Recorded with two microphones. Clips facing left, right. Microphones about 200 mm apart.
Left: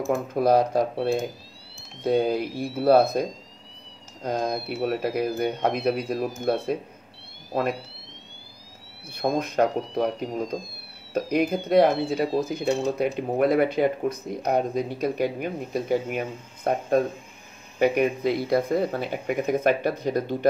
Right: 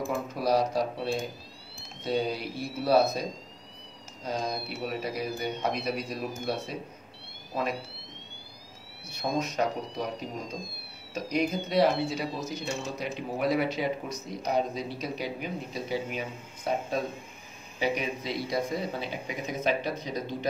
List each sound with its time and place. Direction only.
0.1 s speech: 50° left (ahead or behind)
9.1 s speech: 55° left (ahead or behind)